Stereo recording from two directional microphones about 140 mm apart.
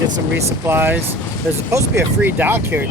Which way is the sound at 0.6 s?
15° right (ahead or behind).